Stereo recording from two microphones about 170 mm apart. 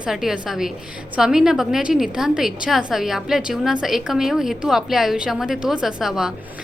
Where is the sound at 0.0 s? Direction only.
Centre (ahead or behind).